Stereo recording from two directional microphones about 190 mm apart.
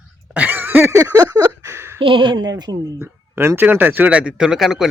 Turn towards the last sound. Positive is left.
turn(degrees=0)  # may be behind; listen again after turning